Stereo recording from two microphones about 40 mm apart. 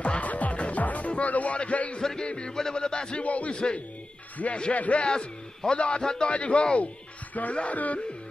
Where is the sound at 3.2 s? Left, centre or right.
Left.